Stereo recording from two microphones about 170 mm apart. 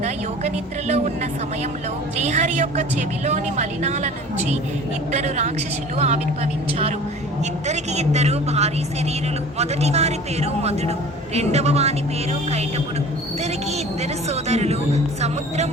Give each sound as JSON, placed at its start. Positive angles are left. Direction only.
{"t": 0.0, "sound": "a woman's voice", "side_deg": -40}
{"t": 5.1, "sound": "speech", "side_deg": -40}